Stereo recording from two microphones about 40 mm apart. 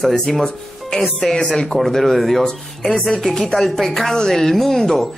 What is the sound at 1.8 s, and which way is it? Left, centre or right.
A woman's voice, centre.